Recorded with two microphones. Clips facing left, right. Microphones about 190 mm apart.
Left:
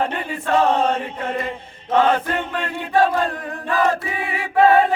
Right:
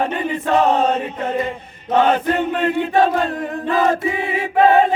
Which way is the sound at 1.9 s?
25° right (ahead or behind).